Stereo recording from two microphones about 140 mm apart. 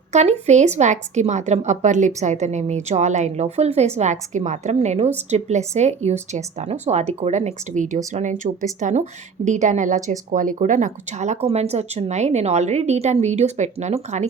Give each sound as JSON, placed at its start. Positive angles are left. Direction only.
{"t": 0.1, "sound": "a woman's voice", "side_deg": -50}